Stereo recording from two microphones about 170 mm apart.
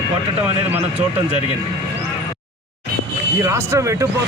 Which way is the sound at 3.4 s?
15° right (ahead or behind).